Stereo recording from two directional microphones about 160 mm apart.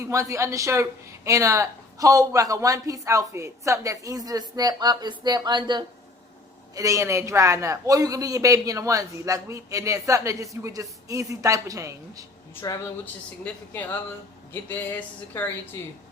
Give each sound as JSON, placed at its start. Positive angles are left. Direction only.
{"t": 0.0, "sound": "speech", "side_deg": -20}
{"t": 12.6, "sound": "a woman's voice", "side_deg": 25}
{"t": 13.4, "sound": "speech", "side_deg": 10}